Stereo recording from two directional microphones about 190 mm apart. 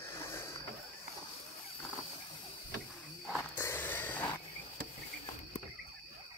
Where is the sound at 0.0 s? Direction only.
15° left (ahead or behind).